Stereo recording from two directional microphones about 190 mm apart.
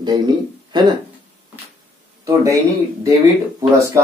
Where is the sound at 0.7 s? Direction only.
25° right (ahead or behind).